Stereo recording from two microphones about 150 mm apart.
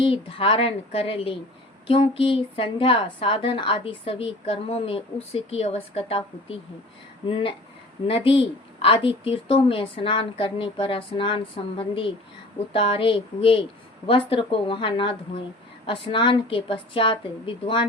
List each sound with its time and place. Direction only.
0.0 s a woman's voice: 35° left (ahead or behind)